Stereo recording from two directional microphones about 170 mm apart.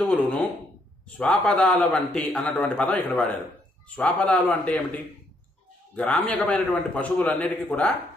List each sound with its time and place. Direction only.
0.0 s a man's voice: 10° left (ahead or behind)
5.9 s a man's voice: 10° left (ahead or behind)